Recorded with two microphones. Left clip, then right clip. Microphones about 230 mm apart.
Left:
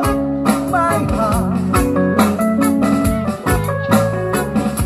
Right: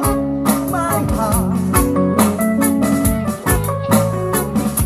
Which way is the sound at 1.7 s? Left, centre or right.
Right.